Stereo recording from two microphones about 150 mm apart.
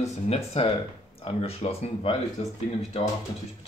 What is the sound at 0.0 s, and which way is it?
Speech, 45° left (ahead or behind).